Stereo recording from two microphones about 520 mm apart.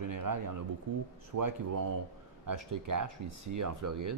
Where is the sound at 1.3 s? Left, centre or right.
Right.